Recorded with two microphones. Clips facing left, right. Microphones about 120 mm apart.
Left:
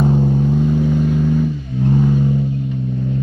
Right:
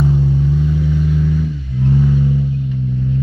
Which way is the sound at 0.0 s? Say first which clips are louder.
Left 1 dB; 45° left (ahead or behind).